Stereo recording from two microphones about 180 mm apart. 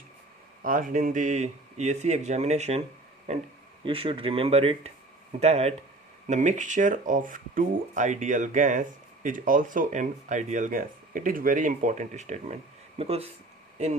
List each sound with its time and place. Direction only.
0.6 s speech: 50° right (ahead or behind)